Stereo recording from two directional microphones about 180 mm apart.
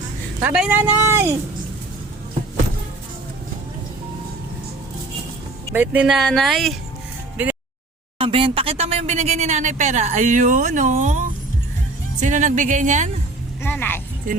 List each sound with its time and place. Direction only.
0.4 s speech: 5° right (ahead or behind)
5.7 s speech: 10° right (ahead or behind)
8.2 s speech: 30° right (ahead or behind)
12.2 s speech: 45° right (ahead or behind)
13.6 s speech: 10° left (ahead or behind)
14.3 s speech: 50° right (ahead or behind)